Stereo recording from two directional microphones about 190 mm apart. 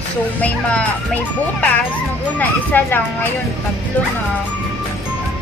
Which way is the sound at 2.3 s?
10° left (ahead or behind).